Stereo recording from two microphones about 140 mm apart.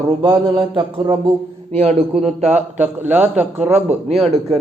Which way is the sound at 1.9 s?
50° right (ahead or behind).